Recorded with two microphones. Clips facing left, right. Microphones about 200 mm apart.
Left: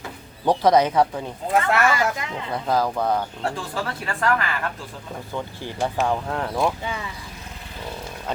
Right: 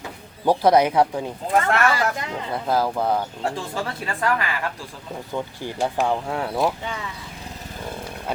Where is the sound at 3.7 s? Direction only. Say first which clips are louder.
Even; 25° right (ahead or behind); by 6.7 s 10° right (ahead or behind).